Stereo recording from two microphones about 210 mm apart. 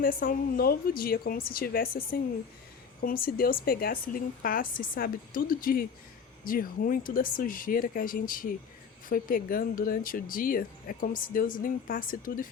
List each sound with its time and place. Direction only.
0.0 s speech: 45° left (ahead or behind)